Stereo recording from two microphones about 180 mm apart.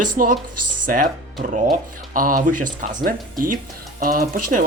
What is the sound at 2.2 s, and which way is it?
Speech, 50° right (ahead or behind).